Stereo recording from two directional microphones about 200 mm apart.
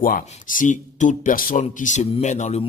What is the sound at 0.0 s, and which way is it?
Speech, 45° left (ahead or behind).